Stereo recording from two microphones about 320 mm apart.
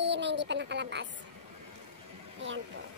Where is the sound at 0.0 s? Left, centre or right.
Right.